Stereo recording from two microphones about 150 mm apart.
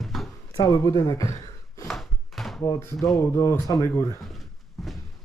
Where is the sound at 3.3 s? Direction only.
20° left (ahead or behind).